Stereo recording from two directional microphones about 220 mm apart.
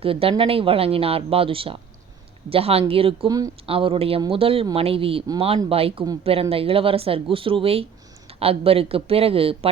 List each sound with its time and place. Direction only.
0.0 s speech: 25° right (ahead or behind)